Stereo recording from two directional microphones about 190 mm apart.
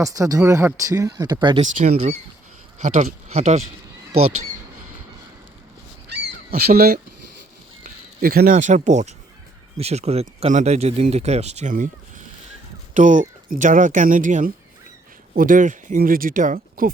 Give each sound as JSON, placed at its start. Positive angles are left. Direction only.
{"t": 0.0, "sound": "speech", "side_deg": -15}
{"t": 1.6, "sound": "speech", "side_deg": -40}
{"t": 6.5, "sound": "speech", "side_deg": -55}